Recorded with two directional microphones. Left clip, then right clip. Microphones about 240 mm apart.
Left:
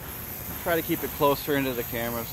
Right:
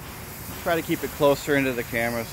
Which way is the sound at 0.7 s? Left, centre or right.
Right.